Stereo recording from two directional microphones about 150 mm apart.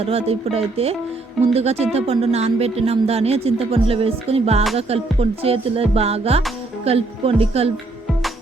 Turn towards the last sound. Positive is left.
turn(degrees=-40)  # may be behind; listen again after turning